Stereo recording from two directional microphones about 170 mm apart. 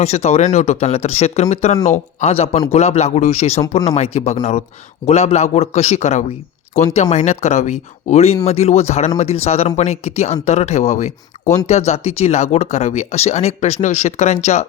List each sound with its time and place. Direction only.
0.0 s speech: 40° left (ahead or behind)